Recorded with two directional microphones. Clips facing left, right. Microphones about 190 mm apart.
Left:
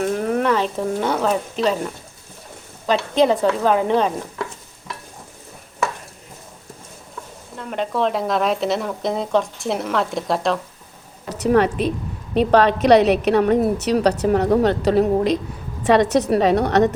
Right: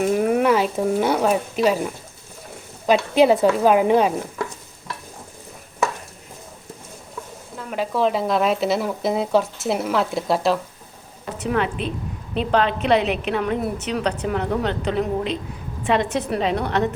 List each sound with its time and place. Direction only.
0.0 s a woman's voice: 10° right (ahead or behind)
7.5 s speech: 5° right (ahead or behind)
11.3 s a woman's voice: 40° left (ahead or behind)